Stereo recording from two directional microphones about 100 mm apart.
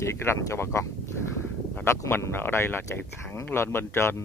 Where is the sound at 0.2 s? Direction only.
25° left (ahead or behind).